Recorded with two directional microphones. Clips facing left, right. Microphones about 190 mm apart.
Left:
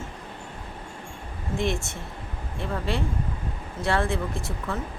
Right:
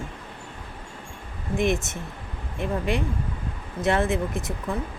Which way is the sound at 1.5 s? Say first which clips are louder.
Right 4 dB; 20° right (ahead or behind).